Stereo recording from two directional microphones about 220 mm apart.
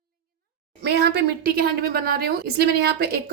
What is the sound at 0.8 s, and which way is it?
A woman's voice, 50° right (ahead or behind).